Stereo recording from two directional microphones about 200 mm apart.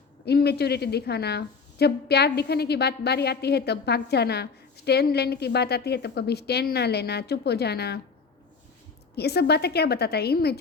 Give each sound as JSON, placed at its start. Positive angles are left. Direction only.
{"t": 0.3, "sound": "a woman's voice", "side_deg": 55}
{"t": 9.1, "sound": "a woman's voice", "side_deg": 55}